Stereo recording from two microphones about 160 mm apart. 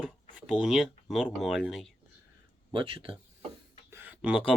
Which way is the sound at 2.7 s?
30° right (ahead or behind).